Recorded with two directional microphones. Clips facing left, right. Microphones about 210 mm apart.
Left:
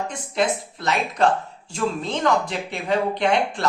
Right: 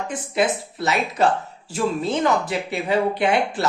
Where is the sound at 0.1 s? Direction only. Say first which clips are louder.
Right 4 dB; 5° right (ahead or behind).